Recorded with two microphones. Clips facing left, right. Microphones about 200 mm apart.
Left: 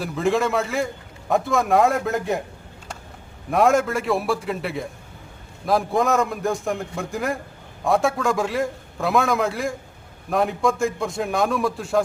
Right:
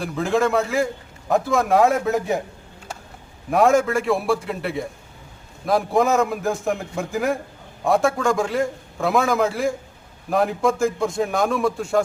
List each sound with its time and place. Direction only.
0.0 s a man's voice: centre (ahead or behind)
3.5 s a man's voice: centre (ahead or behind)